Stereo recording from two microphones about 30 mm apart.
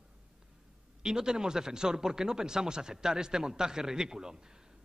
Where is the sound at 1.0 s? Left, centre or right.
Right.